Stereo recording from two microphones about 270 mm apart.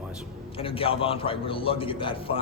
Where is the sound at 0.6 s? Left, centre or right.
Centre.